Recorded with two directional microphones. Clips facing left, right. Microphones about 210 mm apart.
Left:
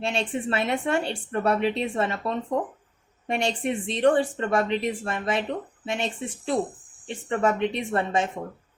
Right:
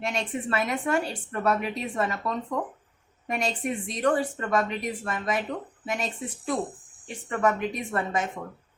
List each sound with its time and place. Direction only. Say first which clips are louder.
0.0 s speech: left 3 dB; 30° left (ahead or behind)